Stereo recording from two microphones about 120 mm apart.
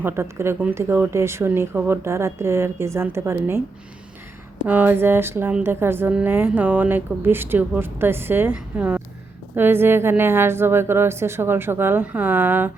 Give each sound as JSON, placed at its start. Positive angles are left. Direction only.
{"t": 0.0, "sound": "speech", "side_deg": -20}
{"t": 4.6, "sound": "a woman's voice", "side_deg": -15}